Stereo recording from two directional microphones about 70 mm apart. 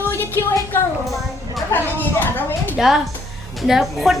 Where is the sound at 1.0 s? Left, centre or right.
Centre.